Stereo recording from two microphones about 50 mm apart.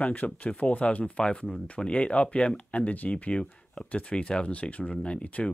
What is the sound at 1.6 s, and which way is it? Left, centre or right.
Speech, left.